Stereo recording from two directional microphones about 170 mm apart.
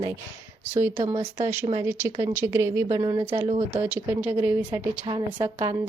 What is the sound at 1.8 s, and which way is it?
A woman's voice, 15° right (ahead or behind).